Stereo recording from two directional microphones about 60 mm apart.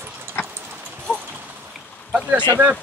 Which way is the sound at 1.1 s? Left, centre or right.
Right.